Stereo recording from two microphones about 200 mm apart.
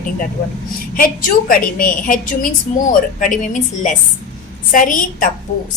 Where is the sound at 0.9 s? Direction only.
45° left (ahead or behind).